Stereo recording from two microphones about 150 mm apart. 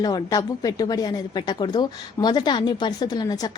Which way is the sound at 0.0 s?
25° left (ahead or behind).